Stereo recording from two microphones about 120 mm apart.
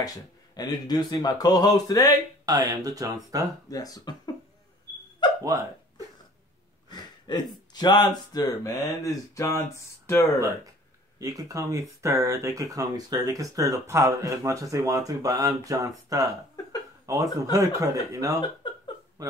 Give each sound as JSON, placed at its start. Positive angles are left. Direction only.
{"t": 0.0, "sound": "speech", "side_deg": 30}
{"t": 2.4, "sound": "speech", "side_deg": -30}
{"t": 3.7, "sound": "speech", "side_deg": 30}
{"t": 5.4, "sound": "dog", "side_deg": -30}
{"t": 6.9, "sound": "speech", "side_deg": 35}
{"t": 11.1, "sound": "speech", "side_deg": -30}